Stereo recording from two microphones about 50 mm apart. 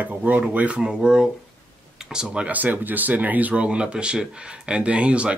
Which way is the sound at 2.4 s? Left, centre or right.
Right.